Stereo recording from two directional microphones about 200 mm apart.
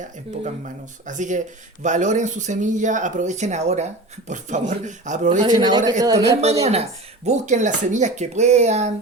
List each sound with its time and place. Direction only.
0.0 s speech: 40° right (ahead or behind)
5.5 s speech: 20° right (ahead or behind)
6.6 s speech: 30° right (ahead or behind)